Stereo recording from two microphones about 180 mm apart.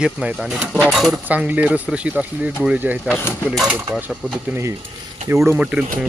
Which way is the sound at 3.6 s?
10° right (ahead or behind).